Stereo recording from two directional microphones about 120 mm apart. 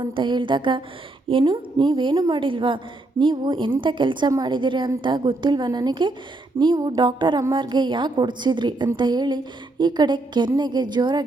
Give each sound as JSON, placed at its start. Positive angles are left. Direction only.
{"t": 0.0, "sound": "music", "side_deg": -40}
{"t": 1.3, "sound": "a woman's voice", "side_deg": -45}
{"t": 3.8, "sound": "music", "side_deg": -40}